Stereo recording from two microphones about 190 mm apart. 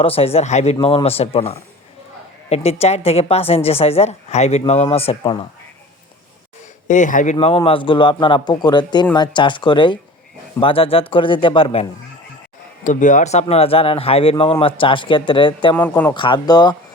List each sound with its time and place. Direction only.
0.0 s a woman's voice: 30° left (ahead or behind)
6.8 s a woman's voice: 40° left (ahead or behind)
7.3 s speech: 30° left (ahead or behind)
12.8 s speech: 40° left (ahead or behind); by 15.7 s 25° left (ahead or behind)
15.7 s speech: 10° left (ahead or behind)
16.1 s speech: 25° left (ahead or behind)